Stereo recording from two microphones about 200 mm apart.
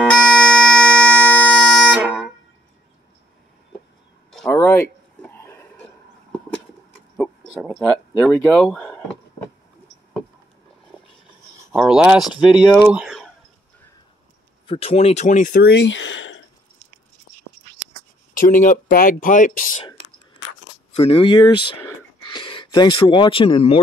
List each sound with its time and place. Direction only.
0.0 s bagpipes: 5° left (ahead or behind)
4.3 s a sound: centre (ahead or behind)
7.2 s owl: 5° right (ahead or behind)
7.8 s a sound: 5° left (ahead or behind)
11.7 s speech: 5° right (ahead or behind)
14.7 s speech: 30° left (ahead or behind)
15.6 s speech: 60° left (ahead or behind)
18.3 s speech: 40° left (ahead or behind)
20.9 s speech: 30° left (ahead or behind)